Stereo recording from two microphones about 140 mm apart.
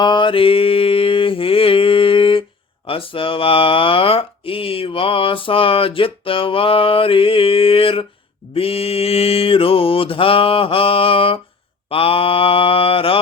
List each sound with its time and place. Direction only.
0.0 s mantra: 35° left (ahead or behind)
2.8 s speech: 40° left (ahead or behind)
11.9 s mantra: 40° left (ahead or behind)